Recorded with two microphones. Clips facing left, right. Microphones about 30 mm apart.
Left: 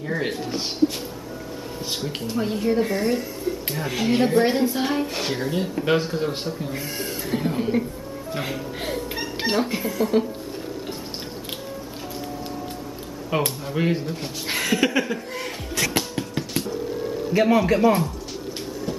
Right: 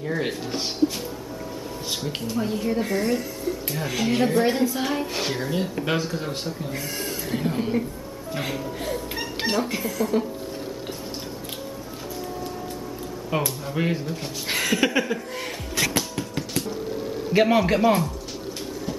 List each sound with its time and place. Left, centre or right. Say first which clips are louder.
0.0 s speech: left 1 dB; centre
2.3 s speech: left 3 dB; centre
9.1 s cat: left 1 dB; centre
9.5 s speech: left 2 dB; centre
13.3 s speech: left 2 dB; centre
16.0 s music: left 1 dB; centre
17.3 s a man's voice: even; centre
17.7 s speech: left 1 dB; centre